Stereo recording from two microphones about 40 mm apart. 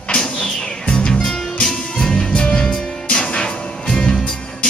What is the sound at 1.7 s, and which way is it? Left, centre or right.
Music, centre.